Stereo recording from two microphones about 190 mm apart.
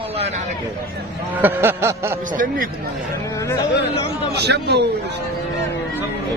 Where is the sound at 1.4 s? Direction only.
10° right (ahead or behind).